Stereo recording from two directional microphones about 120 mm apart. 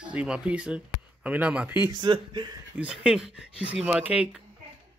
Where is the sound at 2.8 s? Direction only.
10° right (ahead or behind).